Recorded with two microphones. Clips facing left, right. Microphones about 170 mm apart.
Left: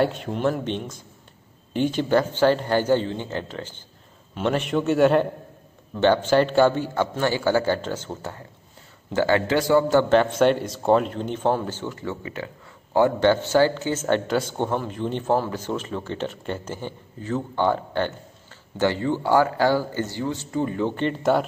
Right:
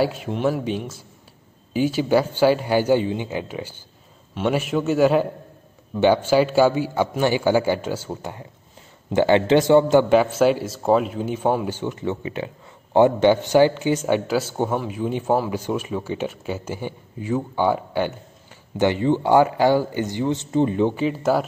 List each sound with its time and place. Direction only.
0.0 s a man's voice: 5° right (ahead or behind); by 20.9 s 20° right (ahead or behind)
20.9 s speech: 5° right (ahead or behind)